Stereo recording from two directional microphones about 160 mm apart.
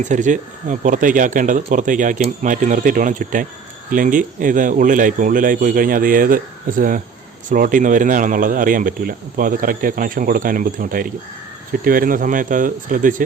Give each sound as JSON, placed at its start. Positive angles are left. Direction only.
{"t": 0.0, "sound": "speech", "side_deg": -50}